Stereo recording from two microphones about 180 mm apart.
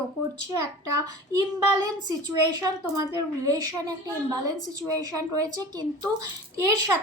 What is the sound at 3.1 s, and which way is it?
A woman's voice, 20° right (ahead or behind).